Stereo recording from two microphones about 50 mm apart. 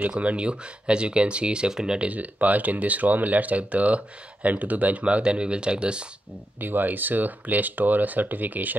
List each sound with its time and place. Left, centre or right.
0.2 s speech: right
2.0 s speech: right
6.6 s speech: right